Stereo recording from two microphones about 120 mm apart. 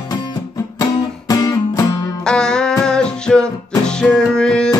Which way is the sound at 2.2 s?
5° left (ahead or behind).